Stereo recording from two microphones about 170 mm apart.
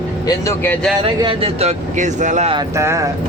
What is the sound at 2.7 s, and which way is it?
Speech, 15° right (ahead or behind).